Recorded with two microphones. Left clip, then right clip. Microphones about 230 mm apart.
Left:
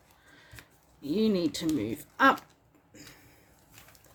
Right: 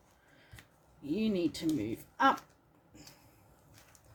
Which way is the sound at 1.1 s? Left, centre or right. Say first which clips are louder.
Left 5 dB; left.